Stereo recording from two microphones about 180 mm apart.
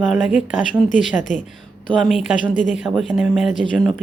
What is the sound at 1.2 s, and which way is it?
Speech, 45° left (ahead or behind).